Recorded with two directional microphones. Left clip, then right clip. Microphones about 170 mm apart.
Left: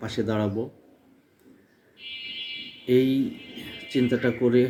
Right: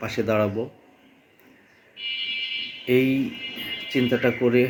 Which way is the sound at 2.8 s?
20° left (ahead or behind).